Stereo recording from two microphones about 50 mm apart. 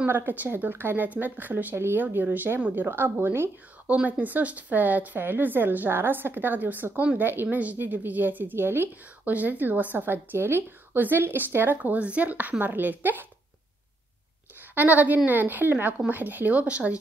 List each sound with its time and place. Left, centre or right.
0.1 s speech: right
1.8 s speech: right
2.0 s speech: right
3.8 s speech: right
9.3 s speech: right
11.8 s speech: right
14.8 s speech: right